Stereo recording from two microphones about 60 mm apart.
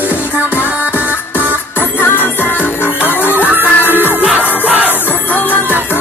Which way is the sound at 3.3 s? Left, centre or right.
Right.